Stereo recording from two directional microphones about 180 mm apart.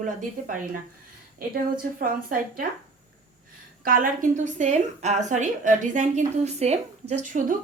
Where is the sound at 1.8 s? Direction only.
50° right (ahead or behind).